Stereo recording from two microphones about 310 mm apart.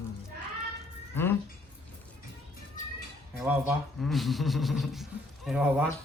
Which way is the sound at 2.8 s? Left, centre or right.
Left.